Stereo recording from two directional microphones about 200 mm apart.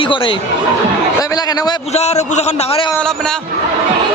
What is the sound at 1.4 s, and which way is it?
Speech, 20° left (ahead or behind).